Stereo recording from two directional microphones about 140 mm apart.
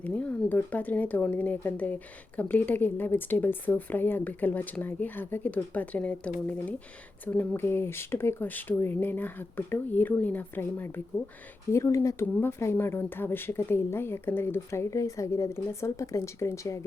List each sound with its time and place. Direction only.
0.0 s speech: 10° left (ahead or behind)